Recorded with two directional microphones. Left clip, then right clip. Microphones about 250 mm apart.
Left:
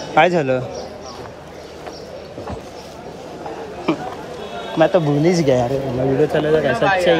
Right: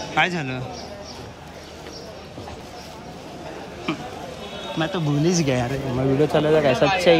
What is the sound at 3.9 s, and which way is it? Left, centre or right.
Chatter, centre.